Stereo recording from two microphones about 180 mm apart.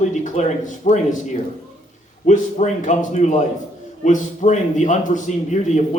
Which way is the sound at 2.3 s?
45° left (ahead or behind).